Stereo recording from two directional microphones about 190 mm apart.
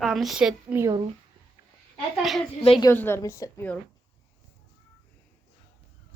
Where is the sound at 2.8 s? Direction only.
10° left (ahead or behind).